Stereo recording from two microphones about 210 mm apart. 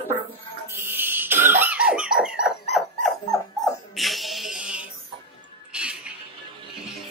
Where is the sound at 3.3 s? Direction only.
15° left (ahead or behind).